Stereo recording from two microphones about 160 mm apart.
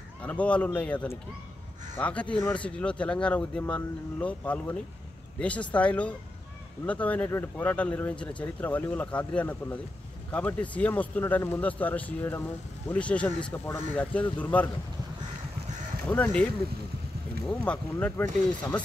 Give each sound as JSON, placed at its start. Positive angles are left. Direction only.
{"t": 0.2, "sound": "speech", "side_deg": 10}
{"t": 16.1, "sound": "speech", "side_deg": 10}
{"t": 17.5, "sound": "speech", "side_deg": 10}